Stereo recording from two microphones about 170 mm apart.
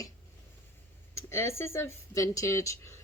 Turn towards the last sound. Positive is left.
turn(degrees=15)  # may be behind; listen again after turning